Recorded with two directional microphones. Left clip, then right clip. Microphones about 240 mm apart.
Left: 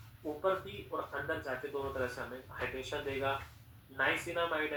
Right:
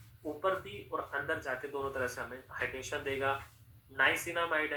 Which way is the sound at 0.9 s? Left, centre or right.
Centre.